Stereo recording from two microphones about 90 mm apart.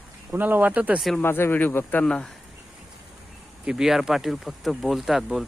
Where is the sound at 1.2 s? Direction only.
25° left (ahead or behind).